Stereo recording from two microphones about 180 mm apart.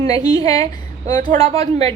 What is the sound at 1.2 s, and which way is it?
Speech, 35° right (ahead or behind).